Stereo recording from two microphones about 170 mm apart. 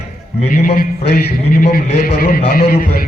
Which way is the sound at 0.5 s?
60° left (ahead or behind).